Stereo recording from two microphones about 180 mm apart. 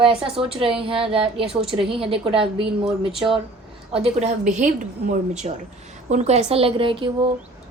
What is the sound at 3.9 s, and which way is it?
A woman's voice, 35° right (ahead or behind).